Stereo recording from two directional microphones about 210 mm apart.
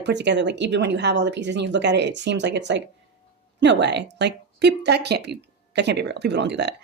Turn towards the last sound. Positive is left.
turn(degrees=-55)  # may be behind; listen again after turning